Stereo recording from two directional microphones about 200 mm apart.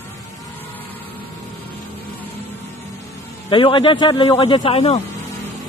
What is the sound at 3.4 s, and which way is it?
A man's voice, 25° left (ahead or behind).